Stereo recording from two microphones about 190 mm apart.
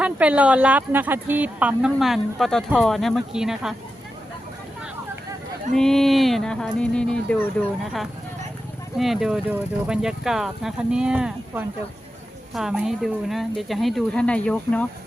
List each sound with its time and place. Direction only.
0.0 s speech: 5° right (ahead or behind)
5.7 s speech: centre (ahead or behind)
9.0 s speech: centre (ahead or behind)